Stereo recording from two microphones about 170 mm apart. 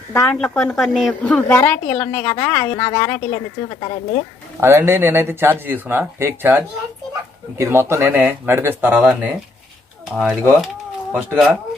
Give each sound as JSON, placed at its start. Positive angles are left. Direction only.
{"t": 0.1, "sound": "a woman's voice", "side_deg": 5}
{"t": 3.8, "sound": "speech", "side_deg": 30}
{"t": 4.6, "sound": "speech", "side_deg": -15}